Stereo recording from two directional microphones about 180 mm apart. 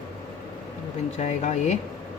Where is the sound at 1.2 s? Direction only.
40° left (ahead or behind).